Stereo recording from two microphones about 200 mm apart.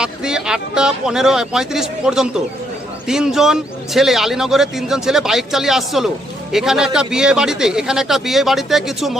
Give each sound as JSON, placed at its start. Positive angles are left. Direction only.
{"t": 0.0, "sound": "speech", "side_deg": -5}